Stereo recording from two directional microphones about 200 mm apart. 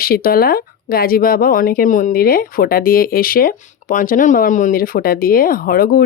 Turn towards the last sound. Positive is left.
turn(degrees=50)  # may be behind; listen again after turning